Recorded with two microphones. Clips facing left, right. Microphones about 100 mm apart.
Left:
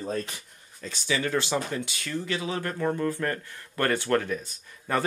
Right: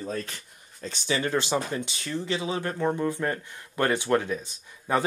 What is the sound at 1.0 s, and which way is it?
Speech, 30° right (ahead or behind).